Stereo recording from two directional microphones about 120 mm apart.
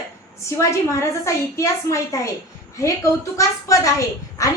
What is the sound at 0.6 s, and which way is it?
A woman's voice, 25° left (ahead or behind).